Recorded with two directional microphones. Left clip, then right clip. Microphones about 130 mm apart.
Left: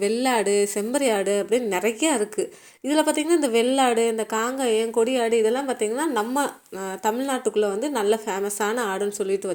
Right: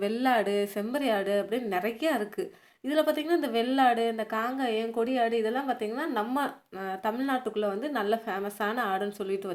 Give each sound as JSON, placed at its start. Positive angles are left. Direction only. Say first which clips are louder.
{"t": 0.0, "sound": "a woman's voice", "louder": "left 4 dB", "side_deg": 20}